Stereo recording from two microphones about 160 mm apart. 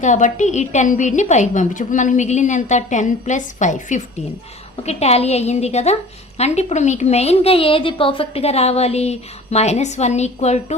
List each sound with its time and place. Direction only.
0.0 s a woman's voice: 50° left (ahead or behind)